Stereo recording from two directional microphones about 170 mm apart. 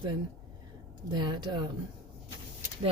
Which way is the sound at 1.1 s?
25° right (ahead or behind).